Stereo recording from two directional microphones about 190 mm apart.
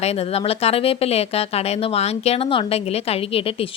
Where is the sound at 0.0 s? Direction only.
35° left (ahead or behind).